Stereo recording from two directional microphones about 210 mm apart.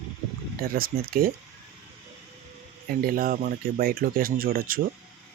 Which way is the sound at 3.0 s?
45° right (ahead or behind).